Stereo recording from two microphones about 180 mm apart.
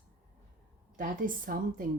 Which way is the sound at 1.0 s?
50° right (ahead or behind).